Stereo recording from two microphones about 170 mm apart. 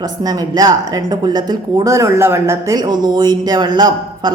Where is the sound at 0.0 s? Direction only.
25° right (ahead or behind).